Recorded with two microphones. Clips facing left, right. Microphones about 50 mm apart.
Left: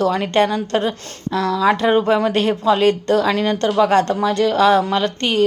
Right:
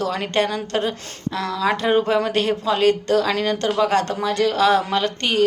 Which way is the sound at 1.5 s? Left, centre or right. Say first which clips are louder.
Left 3 dB; centre.